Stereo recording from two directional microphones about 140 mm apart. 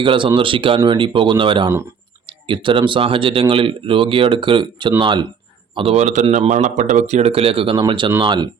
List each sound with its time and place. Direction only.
0.0 s speech: 35° right (ahead or behind)
5.7 s speech: 45° right (ahead or behind)